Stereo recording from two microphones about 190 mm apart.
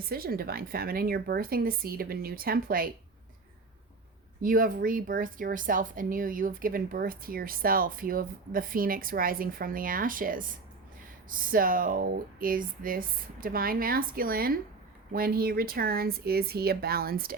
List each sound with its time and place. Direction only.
0.1 s speech: 55° right (ahead or behind)
4.4 s speech: 45° right (ahead or behind)